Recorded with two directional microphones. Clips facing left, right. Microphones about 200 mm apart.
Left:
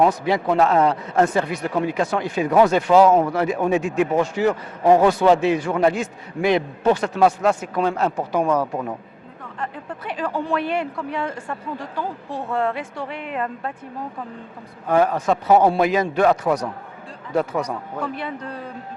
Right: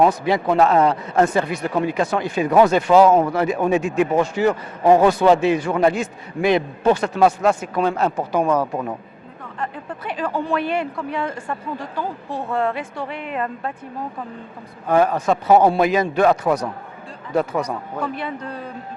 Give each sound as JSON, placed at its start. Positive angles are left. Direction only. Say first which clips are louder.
{"t": 0.3, "sound": "a man's voice", "louder": "right 1 dB", "side_deg": -10}
{"t": 8.1, "sound": "speech", "louder": "right 1 dB", "side_deg": -25}
{"t": 9.6, "sound": "a man's voice", "louder": "right 2 dB", "side_deg": -10}
{"t": 14.8, "sound": "a man's voice", "louder": "right 1 dB", "side_deg": -15}
{"t": 16.3, "sound": "a man's voice", "louder": "right 1 dB", "side_deg": -20}